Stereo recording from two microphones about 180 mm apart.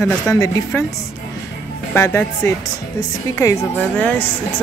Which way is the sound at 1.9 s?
15° left (ahead or behind).